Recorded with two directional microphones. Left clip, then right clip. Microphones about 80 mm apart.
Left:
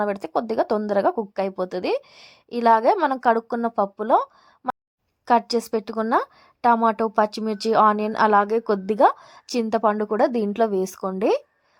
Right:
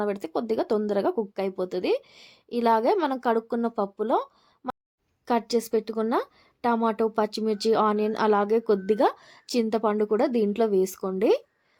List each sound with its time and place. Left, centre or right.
0.0 s a woman's voice: left